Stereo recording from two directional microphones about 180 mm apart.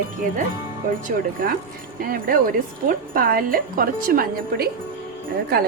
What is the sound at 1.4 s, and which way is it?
A woman's voice, 50° right (ahead or behind).